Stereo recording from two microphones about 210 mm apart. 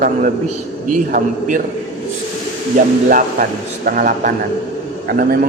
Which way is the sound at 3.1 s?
45° right (ahead or behind).